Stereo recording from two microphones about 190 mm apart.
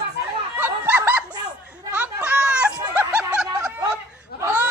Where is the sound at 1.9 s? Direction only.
5° right (ahead or behind).